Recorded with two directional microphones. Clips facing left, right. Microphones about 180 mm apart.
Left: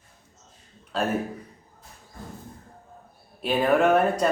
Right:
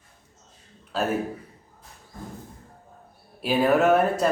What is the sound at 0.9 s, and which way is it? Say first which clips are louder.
Speech: even; 5° right (ahead or behind).